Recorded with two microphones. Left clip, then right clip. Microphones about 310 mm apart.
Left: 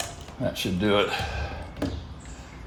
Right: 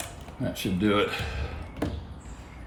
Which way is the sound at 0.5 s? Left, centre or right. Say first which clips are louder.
Left 1 dB; left.